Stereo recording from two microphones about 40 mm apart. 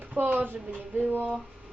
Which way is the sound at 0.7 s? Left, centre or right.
Right.